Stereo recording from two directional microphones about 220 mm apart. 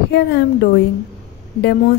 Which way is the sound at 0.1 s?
50° left (ahead or behind).